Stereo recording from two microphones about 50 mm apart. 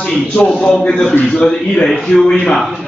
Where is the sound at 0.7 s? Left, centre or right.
Left.